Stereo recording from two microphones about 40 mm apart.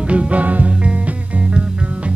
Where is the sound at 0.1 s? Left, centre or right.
Right.